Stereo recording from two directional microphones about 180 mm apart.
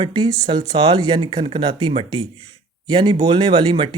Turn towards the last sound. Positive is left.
turn(degrees=-30)  # may be behind; listen again after turning